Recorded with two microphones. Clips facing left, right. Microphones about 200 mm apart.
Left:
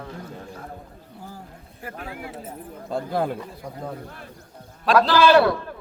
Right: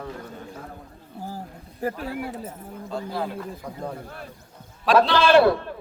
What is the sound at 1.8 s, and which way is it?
Speech, 40° right (ahead or behind).